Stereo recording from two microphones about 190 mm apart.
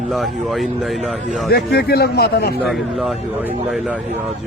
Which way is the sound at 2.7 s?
Centre (ahead or behind).